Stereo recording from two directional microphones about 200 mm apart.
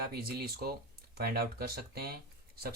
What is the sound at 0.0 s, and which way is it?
Speech, 50° right (ahead or behind).